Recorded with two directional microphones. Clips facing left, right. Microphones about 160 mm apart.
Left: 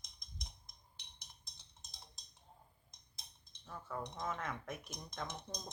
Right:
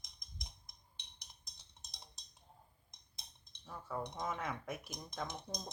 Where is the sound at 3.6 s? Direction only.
10° right (ahead or behind).